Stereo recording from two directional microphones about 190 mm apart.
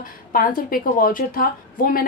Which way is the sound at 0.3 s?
50° left (ahead or behind).